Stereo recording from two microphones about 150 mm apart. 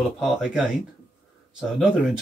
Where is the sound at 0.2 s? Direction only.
Centre (ahead or behind).